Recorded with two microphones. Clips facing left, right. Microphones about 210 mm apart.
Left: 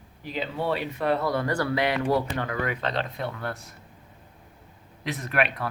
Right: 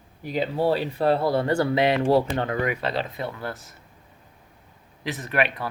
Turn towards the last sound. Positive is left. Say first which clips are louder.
# right 1 dB
turn(degrees=0)  # may be behind; listen again after turning